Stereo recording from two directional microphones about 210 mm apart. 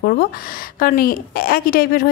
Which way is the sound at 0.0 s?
45° left (ahead or behind).